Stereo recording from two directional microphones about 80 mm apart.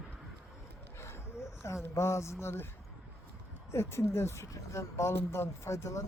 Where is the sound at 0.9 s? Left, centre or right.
Left.